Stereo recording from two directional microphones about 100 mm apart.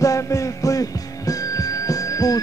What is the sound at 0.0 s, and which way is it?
Music, 30° left (ahead or behind).